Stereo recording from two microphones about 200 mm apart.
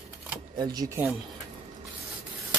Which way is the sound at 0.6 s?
20° right (ahead or behind).